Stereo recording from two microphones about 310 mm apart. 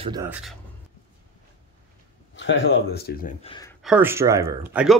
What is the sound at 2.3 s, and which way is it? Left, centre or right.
Speech, left.